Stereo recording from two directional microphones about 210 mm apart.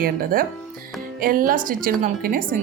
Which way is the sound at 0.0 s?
45° right (ahead or behind).